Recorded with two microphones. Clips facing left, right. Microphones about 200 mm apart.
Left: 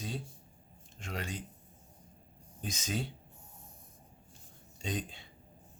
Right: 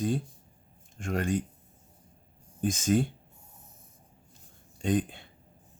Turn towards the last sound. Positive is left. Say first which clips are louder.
# right 10 dB
turn(degrees=-55)  # may be behind; listen again after turning